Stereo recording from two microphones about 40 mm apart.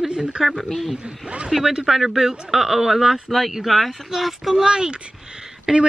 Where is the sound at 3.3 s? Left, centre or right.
Centre.